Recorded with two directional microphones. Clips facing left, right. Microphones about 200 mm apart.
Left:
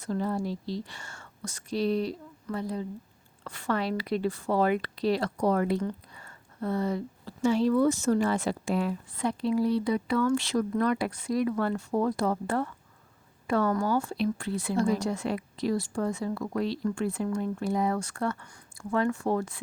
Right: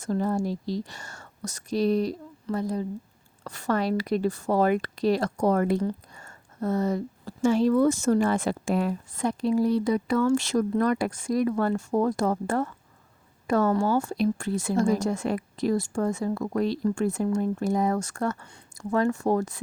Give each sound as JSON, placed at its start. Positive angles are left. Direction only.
{"t": 0.0, "sound": "speech", "side_deg": -45}